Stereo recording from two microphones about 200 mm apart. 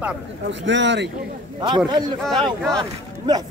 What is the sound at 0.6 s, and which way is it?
Speech, 65° right (ahead or behind).